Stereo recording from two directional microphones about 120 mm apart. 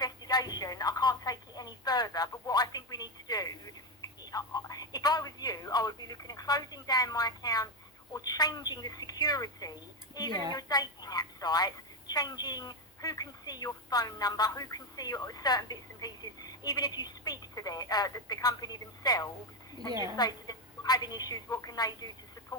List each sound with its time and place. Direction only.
0.0 s telephone: 35° left (ahead or behind)
4.0 s speech: 30° left (ahead or behind)
19.9 s a woman's voice: 25° right (ahead or behind)
20.1 s a woman's voice: 35° left (ahead or behind)